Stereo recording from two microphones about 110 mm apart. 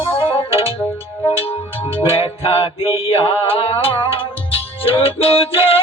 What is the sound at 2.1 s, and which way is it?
Music, 60° left (ahead or behind).